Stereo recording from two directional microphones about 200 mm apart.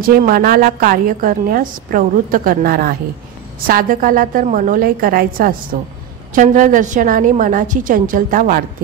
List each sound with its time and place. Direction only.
0.0 s a woman's voice: 45° right (ahead or behind)